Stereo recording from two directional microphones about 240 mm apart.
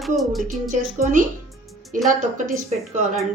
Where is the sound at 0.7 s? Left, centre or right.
Right.